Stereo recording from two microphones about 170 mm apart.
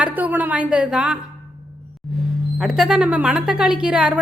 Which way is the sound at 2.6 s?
Centre (ahead or behind).